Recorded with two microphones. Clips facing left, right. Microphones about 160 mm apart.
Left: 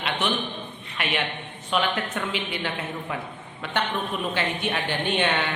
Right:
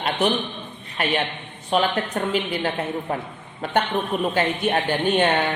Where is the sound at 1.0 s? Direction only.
40° right (ahead or behind).